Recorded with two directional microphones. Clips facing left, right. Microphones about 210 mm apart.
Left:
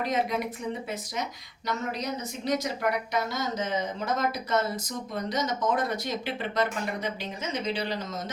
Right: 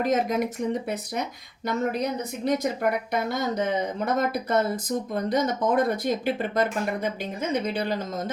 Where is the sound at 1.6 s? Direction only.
55° right (ahead or behind).